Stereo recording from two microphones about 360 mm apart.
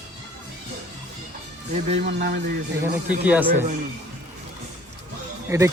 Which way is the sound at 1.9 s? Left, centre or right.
Right.